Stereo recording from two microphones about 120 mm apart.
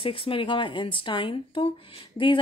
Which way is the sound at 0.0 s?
50° left (ahead or behind).